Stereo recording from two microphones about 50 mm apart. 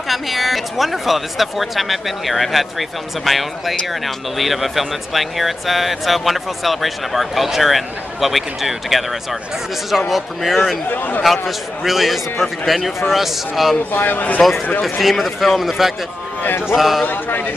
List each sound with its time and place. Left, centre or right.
0.1 s speech: centre
10.9 s a man's voice: left
11.4 s speech: centre
13.9 s a man's voice: left
14.8 s speech: centre
17.0 s a man's voice: left